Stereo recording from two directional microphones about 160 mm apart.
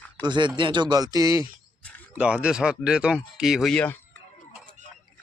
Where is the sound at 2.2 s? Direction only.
5° right (ahead or behind).